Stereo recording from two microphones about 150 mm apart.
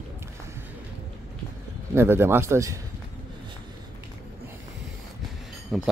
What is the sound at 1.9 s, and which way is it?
Speech, 15° right (ahead or behind).